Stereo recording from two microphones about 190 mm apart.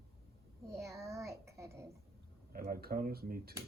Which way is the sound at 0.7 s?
15° right (ahead or behind).